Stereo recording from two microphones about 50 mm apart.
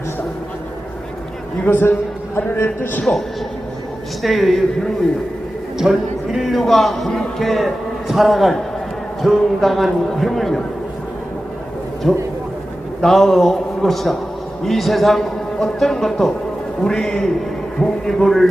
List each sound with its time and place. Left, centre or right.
1.6 s speech: left
3.0 s speech: centre
12.1 s a man's voice: centre